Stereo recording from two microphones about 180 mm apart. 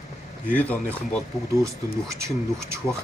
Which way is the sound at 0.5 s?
10° left (ahead or behind).